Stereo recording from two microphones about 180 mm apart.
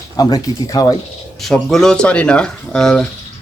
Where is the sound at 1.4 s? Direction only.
Centre (ahead or behind).